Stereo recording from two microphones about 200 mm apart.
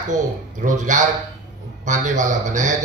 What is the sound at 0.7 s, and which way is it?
A man's voice, 40° right (ahead or behind).